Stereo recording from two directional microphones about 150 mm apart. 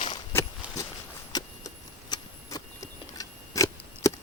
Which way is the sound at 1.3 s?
25° left (ahead or behind).